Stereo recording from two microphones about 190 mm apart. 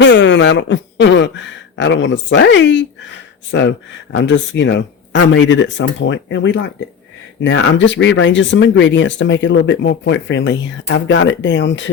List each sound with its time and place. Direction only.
0.0 s speech: 70° left (ahead or behind)
7.4 s speech: 85° left